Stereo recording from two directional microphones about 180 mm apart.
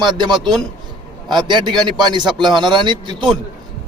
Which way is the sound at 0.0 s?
25° right (ahead or behind).